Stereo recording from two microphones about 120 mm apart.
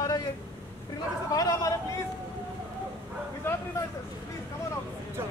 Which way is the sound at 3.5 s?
20° left (ahead or behind).